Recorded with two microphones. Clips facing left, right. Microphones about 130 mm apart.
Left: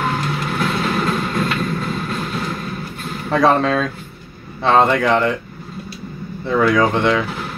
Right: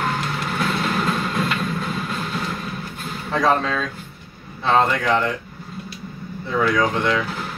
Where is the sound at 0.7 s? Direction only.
Centre (ahead or behind).